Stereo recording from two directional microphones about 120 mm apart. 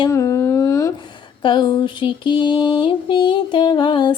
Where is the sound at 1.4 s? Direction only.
40° left (ahead or behind).